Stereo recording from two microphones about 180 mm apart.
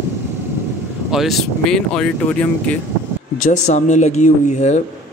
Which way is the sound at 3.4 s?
40° left (ahead or behind).